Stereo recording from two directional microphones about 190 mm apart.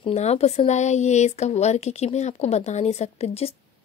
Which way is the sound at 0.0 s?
35° left (ahead or behind).